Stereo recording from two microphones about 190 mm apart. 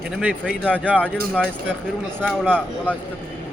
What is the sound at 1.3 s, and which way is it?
Speech, 5° left (ahead or behind).